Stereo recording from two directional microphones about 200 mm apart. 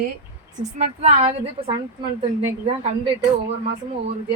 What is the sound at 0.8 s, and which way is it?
Speech, 35° right (ahead or behind).